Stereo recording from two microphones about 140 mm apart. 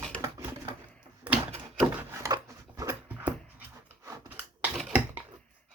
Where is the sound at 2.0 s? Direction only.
20° right (ahead or behind).